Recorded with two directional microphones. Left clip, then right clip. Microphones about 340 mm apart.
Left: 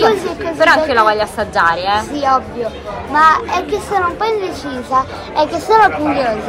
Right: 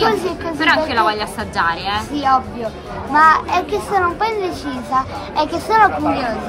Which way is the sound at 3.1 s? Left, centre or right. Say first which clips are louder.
Left 1 dB; centre.